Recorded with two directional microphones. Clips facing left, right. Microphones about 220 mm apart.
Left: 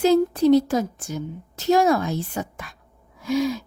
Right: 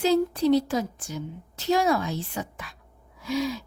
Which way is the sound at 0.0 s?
50° left (ahead or behind).